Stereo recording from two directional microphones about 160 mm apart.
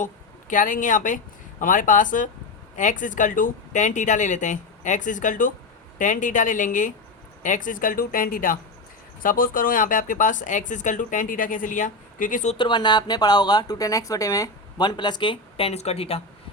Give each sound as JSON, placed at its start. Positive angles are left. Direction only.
{"t": 0.0, "sound": "speech", "side_deg": 55}
{"t": 12.5, "sound": "speech", "side_deg": 30}